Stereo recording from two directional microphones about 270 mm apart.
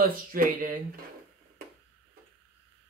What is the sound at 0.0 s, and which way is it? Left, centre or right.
Speech, right.